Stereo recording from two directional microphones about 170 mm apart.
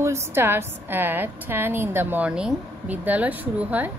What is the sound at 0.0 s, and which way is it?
A woman's voice, 15° right (ahead or behind).